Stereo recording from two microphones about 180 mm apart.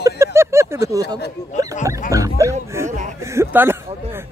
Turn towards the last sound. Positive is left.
turn(degrees=-15)  # may be behind; listen again after turning